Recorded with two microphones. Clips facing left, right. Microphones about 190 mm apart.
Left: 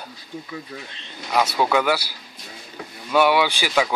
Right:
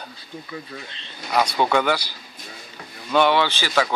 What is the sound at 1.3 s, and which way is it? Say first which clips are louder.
Speech: even; 5° left (ahead or behind).